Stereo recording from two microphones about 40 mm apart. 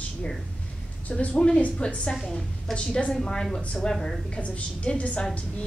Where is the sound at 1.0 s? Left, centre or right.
Left.